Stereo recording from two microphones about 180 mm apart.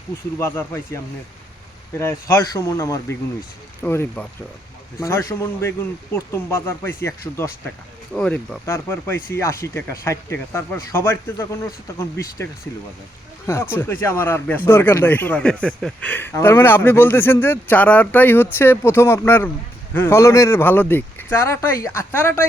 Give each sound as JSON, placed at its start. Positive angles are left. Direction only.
{"t": 0.3, "sound": "speech", "side_deg": 15}
{"t": 2.0, "sound": "speech", "side_deg": 15}
{"t": 13.5, "sound": "speech", "side_deg": 15}